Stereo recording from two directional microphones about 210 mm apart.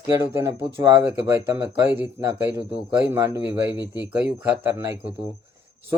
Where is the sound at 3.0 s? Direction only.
15° right (ahead or behind).